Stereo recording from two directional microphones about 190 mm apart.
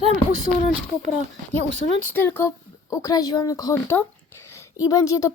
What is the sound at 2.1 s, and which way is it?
Speech, 10° left (ahead or behind).